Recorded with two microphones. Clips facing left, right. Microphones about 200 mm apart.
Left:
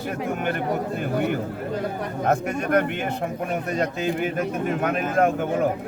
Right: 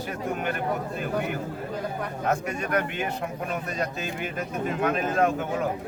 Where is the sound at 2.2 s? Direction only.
50° left (ahead or behind).